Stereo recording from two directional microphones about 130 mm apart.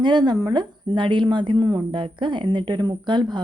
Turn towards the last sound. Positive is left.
turn(degrees=-35)  # may be behind; listen again after turning